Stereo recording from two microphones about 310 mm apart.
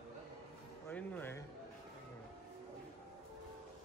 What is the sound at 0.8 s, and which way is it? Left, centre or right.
Speech, centre.